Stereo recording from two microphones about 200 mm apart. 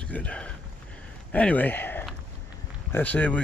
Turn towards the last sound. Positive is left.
turn(degrees=5)  # may be behind; listen again after turning